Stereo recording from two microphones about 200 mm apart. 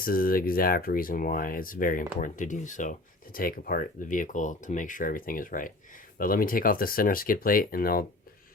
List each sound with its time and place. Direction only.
0.0 s speech: 45° left (ahead or behind)